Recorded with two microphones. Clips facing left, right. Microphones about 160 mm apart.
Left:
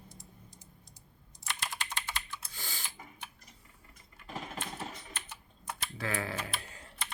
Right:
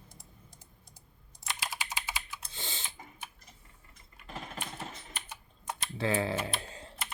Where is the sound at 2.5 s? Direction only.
25° right (ahead or behind).